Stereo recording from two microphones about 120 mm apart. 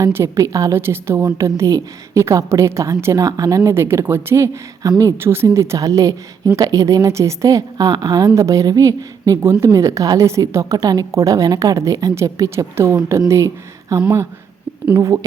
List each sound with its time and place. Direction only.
0.0 s a woman's voice: 25° right (ahead or behind)